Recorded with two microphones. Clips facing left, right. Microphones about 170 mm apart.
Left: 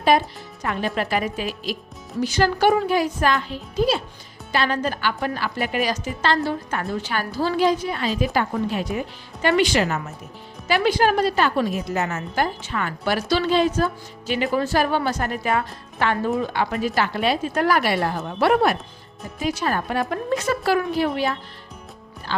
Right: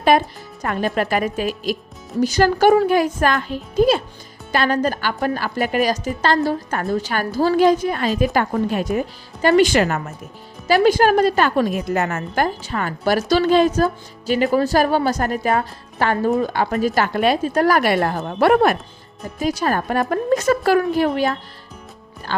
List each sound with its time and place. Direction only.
0.6 s a woman's voice: 45° right (ahead or behind)
12.6 s a woman's voice: 40° right (ahead or behind)
19.4 s a woman's voice: 40° right (ahead or behind)